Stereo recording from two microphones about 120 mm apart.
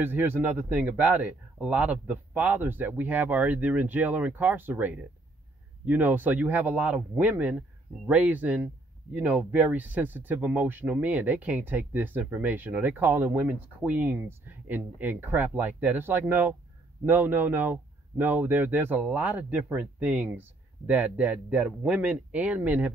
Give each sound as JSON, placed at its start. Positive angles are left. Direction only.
{"t": 0.0, "sound": "speech", "side_deg": -15}